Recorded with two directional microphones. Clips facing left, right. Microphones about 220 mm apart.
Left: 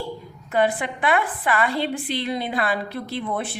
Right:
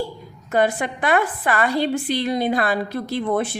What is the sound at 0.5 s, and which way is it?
A woman's voice, 45° right (ahead or behind).